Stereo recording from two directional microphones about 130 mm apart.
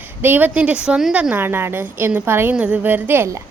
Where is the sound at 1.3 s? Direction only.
15° right (ahead or behind).